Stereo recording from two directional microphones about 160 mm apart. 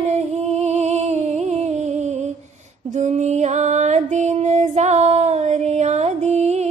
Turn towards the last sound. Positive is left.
turn(degrees=-45)  # may be behind; listen again after turning